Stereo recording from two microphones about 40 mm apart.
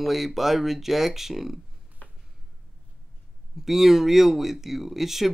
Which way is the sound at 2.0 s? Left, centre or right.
Left.